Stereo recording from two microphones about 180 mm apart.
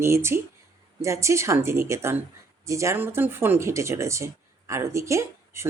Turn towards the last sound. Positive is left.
turn(degrees=-15)  # may be behind; listen again after turning